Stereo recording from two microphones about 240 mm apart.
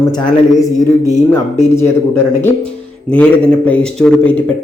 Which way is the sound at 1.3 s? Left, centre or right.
Centre.